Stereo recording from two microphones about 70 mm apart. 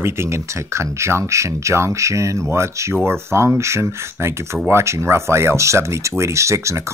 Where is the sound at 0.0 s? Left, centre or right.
Right.